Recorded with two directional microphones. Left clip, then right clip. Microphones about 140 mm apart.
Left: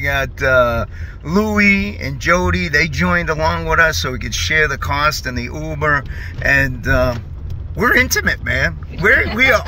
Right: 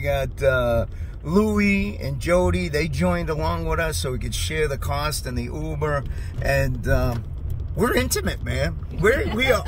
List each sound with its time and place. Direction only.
0.0 s speech: 10° right (ahead or behind)